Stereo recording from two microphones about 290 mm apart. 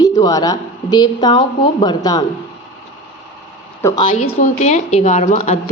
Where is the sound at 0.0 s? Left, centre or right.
Centre.